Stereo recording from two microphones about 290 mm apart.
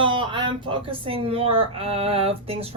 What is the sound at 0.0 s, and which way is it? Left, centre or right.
Speech, centre.